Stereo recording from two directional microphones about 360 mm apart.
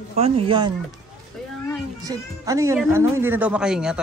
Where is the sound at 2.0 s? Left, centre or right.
Centre.